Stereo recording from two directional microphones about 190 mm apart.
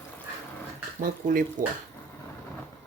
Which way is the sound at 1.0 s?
50° right (ahead or behind).